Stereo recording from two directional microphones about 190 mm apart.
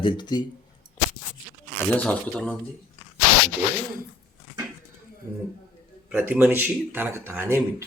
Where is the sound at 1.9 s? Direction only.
5° left (ahead or behind).